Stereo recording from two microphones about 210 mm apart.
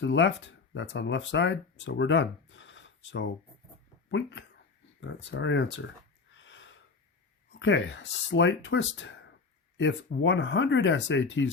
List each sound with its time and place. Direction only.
0.0 s speech: 60° left (ahead or behind)
6.3 s a sound: 60° left (ahead or behind)
7.6 s speech: 60° left (ahead or behind)